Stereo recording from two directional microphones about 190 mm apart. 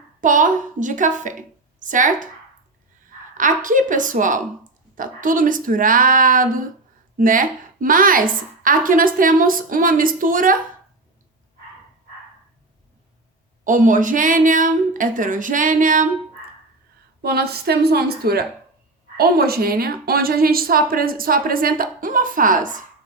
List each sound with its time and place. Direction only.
0.2 s a woman's voice: 45° right (ahead or behind)
3.3 s a woman's voice: 45° right (ahead or behind)
13.7 s a woman's voice: 45° right (ahead or behind)
17.2 s a woman's voice: 55° right (ahead or behind)